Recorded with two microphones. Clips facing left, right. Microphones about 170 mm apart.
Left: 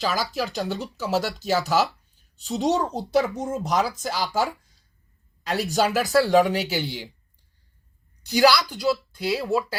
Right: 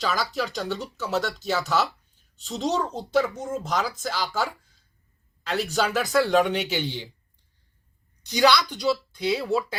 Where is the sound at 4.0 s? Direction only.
40° left (ahead or behind).